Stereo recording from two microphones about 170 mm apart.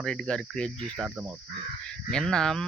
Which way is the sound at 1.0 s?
5° right (ahead or behind).